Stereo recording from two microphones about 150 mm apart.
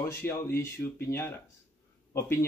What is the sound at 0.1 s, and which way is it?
Speech, 15° left (ahead or behind).